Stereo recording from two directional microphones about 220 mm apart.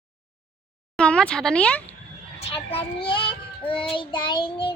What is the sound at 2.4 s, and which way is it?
Speech, 25° left (ahead or behind).